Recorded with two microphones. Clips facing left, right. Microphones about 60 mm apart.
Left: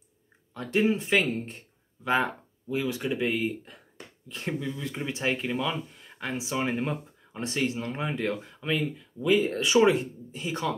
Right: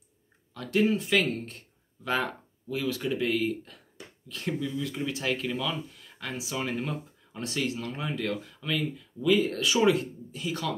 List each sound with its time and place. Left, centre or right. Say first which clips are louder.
0.6 s speech: even; left